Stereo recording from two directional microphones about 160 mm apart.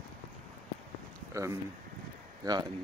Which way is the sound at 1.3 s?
20° right (ahead or behind).